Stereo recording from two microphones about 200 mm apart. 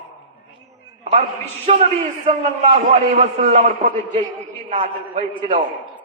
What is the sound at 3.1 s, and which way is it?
A man's voice, 35° right (ahead or behind).